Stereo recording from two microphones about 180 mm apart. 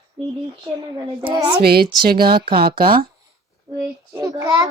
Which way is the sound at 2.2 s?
25° right (ahead or behind).